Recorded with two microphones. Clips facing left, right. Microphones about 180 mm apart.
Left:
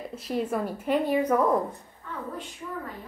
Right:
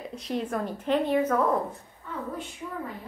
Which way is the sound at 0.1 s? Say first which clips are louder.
Left 2 dB; 5° left (ahead or behind).